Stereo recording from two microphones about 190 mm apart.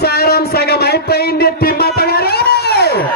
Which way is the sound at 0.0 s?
55° left (ahead or behind).